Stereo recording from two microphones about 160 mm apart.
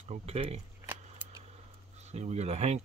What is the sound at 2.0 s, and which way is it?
Speech, 45° right (ahead or behind).